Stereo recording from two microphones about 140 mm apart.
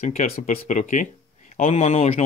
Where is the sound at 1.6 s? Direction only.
50° left (ahead or behind).